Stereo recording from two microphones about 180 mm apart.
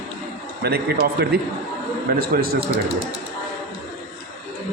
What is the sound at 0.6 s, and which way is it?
A man's voice, 60° right (ahead or behind).